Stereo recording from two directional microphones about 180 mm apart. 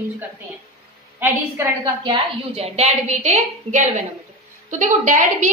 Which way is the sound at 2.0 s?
35° right (ahead or behind).